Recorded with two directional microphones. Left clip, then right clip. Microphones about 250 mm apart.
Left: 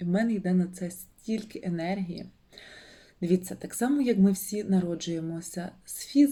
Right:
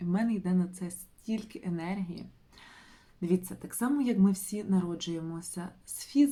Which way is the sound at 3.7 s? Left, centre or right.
Right.